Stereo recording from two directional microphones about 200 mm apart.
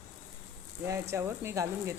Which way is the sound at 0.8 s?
15° right (ahead or behind).